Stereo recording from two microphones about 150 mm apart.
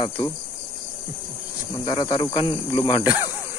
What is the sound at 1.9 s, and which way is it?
Cricket, 25° left (ahead or behind).